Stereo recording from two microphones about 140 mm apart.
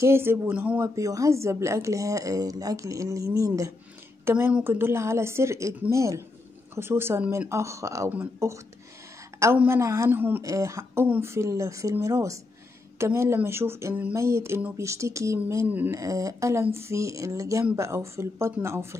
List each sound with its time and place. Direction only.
0.0 s speech: 15° right (ahead or behind)
0.8 s a woman's voice: 25° right (ahead or behind)